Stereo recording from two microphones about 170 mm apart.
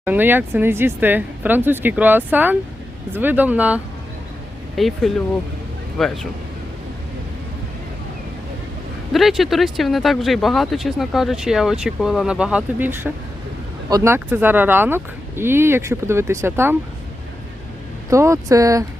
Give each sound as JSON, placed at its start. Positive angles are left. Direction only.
{"t": 0.0, "sound": "speech", "side_deg": -10}
{"t": 4.8, "sound": "speech", "side_deg": 0}
{"t": 9.1, "sound": "speech", "side_deg": 0}
{"t": 18.1, "sound": "speech", "side_deg": -20}